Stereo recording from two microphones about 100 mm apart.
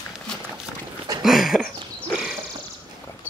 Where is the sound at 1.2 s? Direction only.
5° right (ahead or behind).